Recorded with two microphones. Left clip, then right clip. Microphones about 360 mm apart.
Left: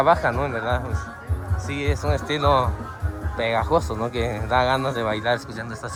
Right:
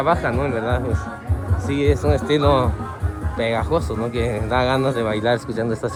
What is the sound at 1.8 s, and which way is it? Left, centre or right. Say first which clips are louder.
Speech: right 6 dB; centre.